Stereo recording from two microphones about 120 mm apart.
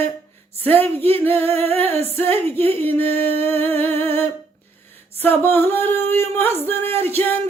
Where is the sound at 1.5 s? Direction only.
55° right (ahead or behind).